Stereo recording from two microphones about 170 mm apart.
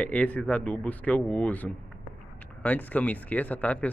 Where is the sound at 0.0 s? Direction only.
10° left (ahead or behind).